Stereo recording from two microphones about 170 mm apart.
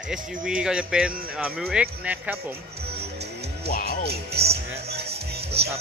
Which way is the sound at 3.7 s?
55° left (ahead or behind).